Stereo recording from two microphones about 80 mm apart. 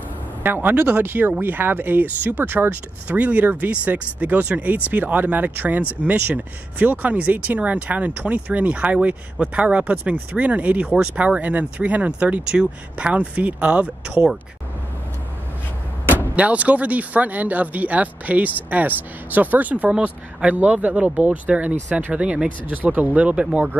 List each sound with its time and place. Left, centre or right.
0.4 s speech: right
16.1 s speech: right